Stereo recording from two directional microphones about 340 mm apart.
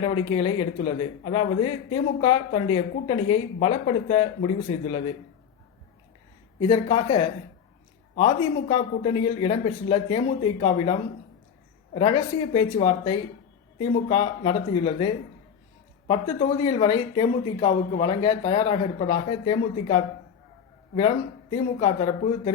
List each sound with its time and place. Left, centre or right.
0.0 s speech: centre
6.6 s speech: centre
11.9 s speech: centre
21.5 s speech: centre